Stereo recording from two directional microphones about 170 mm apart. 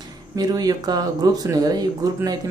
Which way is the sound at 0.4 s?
20° right (ahead or behind).